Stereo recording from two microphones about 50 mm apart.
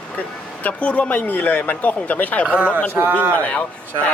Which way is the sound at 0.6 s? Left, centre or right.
Left.